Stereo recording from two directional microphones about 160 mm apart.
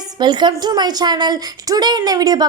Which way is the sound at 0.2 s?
30° right (ahead or behind).